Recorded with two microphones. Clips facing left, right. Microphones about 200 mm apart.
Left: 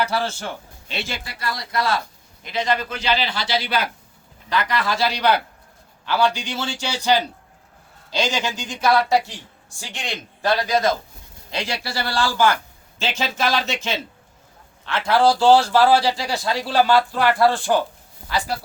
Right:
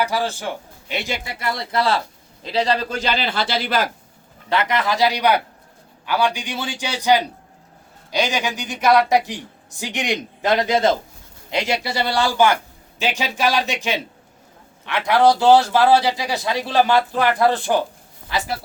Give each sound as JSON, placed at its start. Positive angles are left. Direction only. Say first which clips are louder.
{"t": 0.0, "sound": "a man's voice", "louder": "right 1 dB", "side_deg": -15}
{"t": 3.0, "sound": "a man's voice", "louder": "right 1 dB", "side_deg": -50}
{"t": 4.4, "sound": "a man's voice", "louder": "right 2 dB", "side_deg": -25}